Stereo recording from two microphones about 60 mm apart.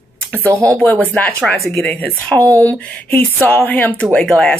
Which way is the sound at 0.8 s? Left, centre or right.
Left.